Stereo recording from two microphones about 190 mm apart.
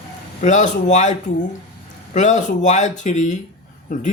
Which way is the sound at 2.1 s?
40° left (ahead or behind).